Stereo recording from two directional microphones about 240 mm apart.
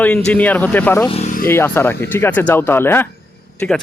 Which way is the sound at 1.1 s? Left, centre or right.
Left.